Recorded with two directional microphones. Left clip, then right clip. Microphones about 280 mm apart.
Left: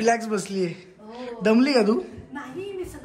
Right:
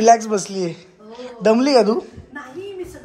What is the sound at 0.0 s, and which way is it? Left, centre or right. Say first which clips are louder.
A woman's voice: right 9 dB; centre.